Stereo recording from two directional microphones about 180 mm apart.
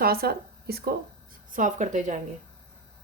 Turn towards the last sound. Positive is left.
turn(degrees=-45)  # may be behind; listen again after turning